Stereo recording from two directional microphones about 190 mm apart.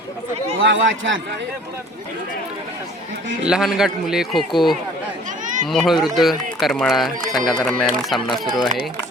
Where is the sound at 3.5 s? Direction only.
5° right (ahead or behind).